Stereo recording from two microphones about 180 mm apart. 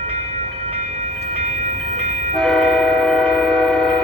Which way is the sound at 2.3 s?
Centre (ahead or behind).